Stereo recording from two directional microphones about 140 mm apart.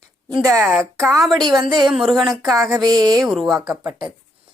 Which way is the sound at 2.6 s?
25° right (ahead or behind).